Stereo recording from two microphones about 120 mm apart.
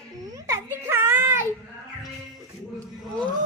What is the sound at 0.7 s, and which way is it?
Speech, 20° right (ahead or behind).